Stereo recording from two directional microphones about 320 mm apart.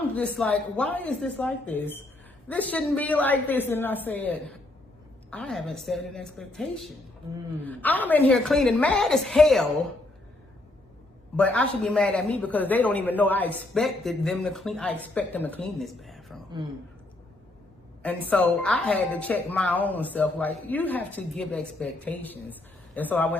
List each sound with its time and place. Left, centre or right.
0.1 s speech: centre
11.3 s speech: centre
18.0 s speech: centre